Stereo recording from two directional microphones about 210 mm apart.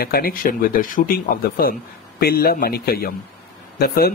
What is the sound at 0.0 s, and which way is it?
Speech, 45° left (ahead or behind).